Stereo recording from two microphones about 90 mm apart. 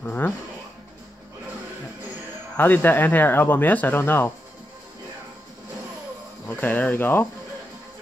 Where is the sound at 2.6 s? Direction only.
20° left (ahead or behind).